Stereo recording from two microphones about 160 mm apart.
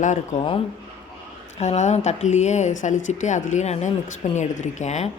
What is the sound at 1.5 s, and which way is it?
Speech, 45° left (ahead or behind).